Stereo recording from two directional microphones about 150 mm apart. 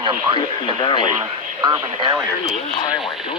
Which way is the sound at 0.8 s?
30° left (ahead or behind).